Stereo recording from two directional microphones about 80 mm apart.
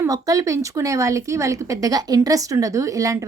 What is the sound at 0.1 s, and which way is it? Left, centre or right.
A woman's voice, right.